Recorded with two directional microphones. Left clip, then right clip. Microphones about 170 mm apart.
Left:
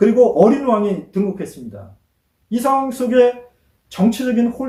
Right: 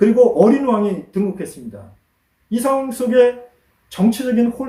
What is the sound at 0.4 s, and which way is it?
Speech, 15° right (ahead or behind).